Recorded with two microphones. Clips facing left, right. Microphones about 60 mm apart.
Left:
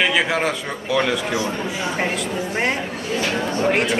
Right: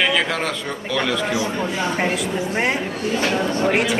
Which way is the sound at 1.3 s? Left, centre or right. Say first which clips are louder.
Even; left.